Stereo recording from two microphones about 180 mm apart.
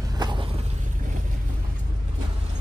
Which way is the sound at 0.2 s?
25° right (ahead or behind).